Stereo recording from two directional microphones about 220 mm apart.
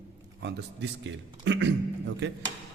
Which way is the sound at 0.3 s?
50° right (ahead or behind).